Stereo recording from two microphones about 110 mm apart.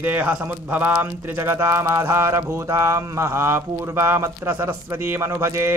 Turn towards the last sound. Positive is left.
turn(degrees=-25)  # may be behind; listen again after turning